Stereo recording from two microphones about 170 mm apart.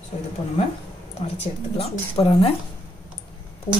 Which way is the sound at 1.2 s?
35° left (ahead or behind).